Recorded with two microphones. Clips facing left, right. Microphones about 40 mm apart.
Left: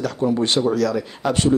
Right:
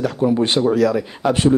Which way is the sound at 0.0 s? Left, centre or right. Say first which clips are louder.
Right 3 dB; centre.